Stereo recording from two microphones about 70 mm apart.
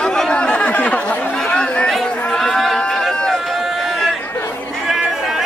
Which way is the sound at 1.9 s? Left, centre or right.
Centre.